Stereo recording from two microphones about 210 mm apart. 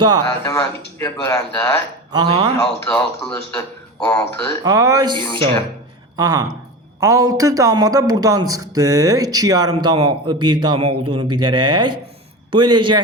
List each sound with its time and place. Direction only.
0.3 s a man's voice: 15° left (ahead or behind)
2.1 s a man's voice: 25° right (ahead or behind)
2.6 s a man's voice: 5° left (ahead or behind)
4.6 s a man's voice: 15° right (ahead or behind)